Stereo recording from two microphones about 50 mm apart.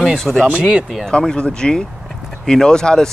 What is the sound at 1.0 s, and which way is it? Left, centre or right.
Speech, centre.